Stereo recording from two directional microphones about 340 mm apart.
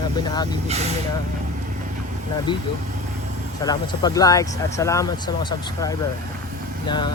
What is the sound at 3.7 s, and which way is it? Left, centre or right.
Speech, centre.